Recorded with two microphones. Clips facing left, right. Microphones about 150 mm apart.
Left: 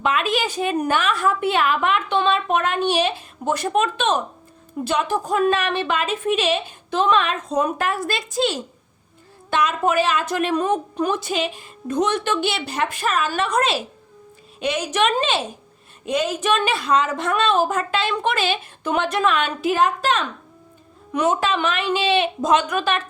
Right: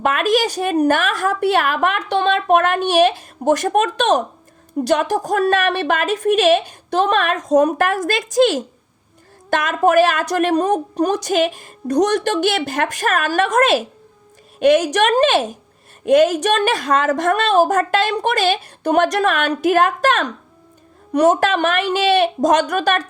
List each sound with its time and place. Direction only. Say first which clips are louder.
0.0 s a woman's voice: right 5 dB; 45° right (ahead or behind)